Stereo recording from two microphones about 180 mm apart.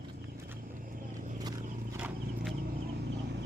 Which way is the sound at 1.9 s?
5° right (ahead or behind).